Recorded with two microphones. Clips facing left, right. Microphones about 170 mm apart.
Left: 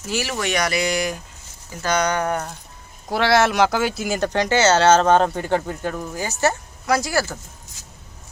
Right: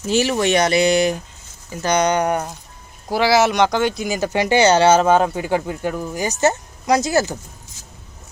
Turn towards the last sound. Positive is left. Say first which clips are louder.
# right 4 dB
turn(degrees=-20)  # may be behind; listen again after turning